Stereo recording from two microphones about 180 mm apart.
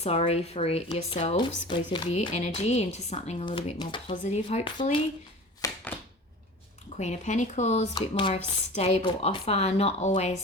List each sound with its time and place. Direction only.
0.0 s a woman's voice: 35° left (ahead or behind)
1.4 s a woman's voice: 25° left (ahead or behind)
3.4 s speech: 25° left (ahead or behind)
4.1 s a woman's voice: 40° left (ahead or behind)
5.6 s a sound: 20° left (ahead or behind)
6.9 s a woman's voice: 40° left (ahead or behind)